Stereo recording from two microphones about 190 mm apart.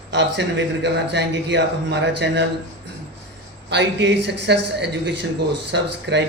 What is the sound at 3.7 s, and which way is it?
A man's voice, 65° right (ahead or behind).